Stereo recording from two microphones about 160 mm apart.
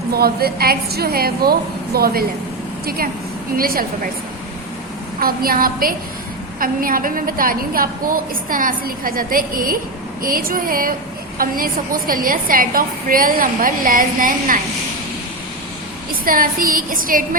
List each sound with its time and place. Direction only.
0.1 s a woman's voice: 75° right (ahead or behind)
3.6 s a woman's voice: 65° right (ahead or behind)
5.2 s a woman's voice: 65° right (ahead or behind)
16.2 s a woman's voice: 60° right (ahead or behind)